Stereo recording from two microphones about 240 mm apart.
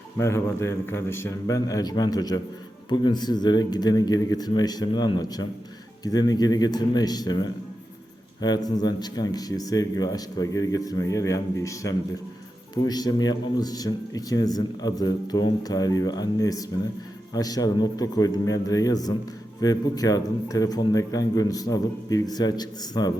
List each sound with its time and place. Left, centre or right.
0.2 s speech: centre